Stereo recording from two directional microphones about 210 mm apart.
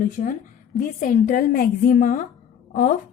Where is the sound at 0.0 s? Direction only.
40° left (ahead or behind).